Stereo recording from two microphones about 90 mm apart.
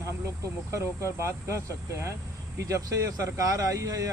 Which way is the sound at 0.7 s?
30° right (ahead or behind).